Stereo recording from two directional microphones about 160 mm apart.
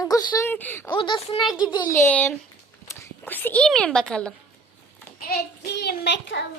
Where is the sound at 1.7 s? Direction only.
25° left (ahead or behind).